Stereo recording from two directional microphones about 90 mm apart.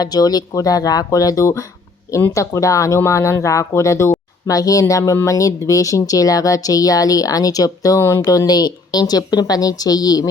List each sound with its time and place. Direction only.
0.0 s speech: 45° left (ahead or behind)
8.2 s speech: 45° left (ahead or behind)